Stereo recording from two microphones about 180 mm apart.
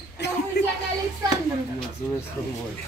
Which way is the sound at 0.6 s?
65° left (ahead or behind).